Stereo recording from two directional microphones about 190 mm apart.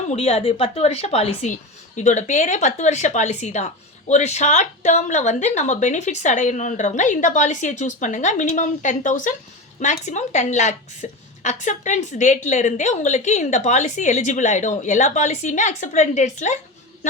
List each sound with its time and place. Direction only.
0.1 s a woman's voice: 35° left (ahead or behind)